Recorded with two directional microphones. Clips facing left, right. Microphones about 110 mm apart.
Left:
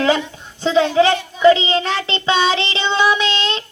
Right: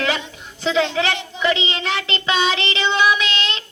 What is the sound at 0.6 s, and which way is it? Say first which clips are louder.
Child singing: left 6 dB; 30° left (ahead or behind).